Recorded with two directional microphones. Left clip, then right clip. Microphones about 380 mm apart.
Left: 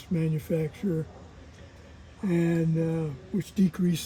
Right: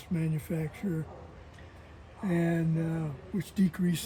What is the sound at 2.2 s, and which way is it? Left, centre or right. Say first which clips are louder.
Speech: left 3 dB; centre.